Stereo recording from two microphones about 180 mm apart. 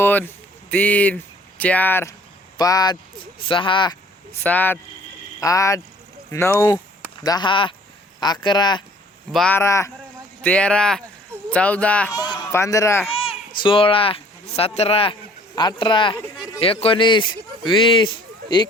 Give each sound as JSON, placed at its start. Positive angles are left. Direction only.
{"t": 0.0, "sound": "a man's voice", "side_deg": 10}
{"t": 4.4, "sound": "a man's voice", "side_deg": 10}
{"t": 9.3, "sound": "speech", "side_deg": 5}
{"t": 9.6, "sound": "speech", "side_deg": 15}
{"t": 12.1, "sound": "speech", "side_deg": 25}
{"t": 13.1, "sound": "a sound", "side_deg": 30}
{"t": 13.6, "sound": "a man's voice", "side_deg": 30}